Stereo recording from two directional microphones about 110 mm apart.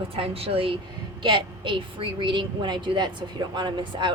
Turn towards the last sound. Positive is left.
turn(degrees=-45)  # may be behind; listen again after turning